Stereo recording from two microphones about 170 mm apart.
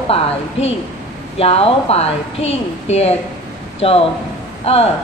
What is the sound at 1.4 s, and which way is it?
Speech, 35° left (ahead or behind).